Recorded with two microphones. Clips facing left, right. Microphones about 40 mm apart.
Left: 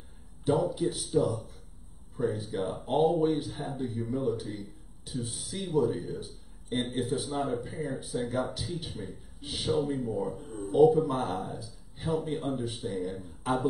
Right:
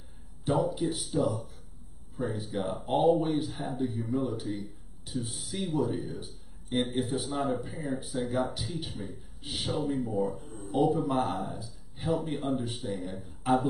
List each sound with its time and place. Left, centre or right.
0.5 s a man's voice: centre
8.6 s speech: centre
8.9 s a man's voice: centre